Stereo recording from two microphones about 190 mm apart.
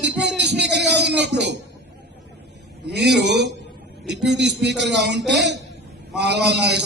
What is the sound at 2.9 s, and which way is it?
Speech, 65° right (ahead or behind).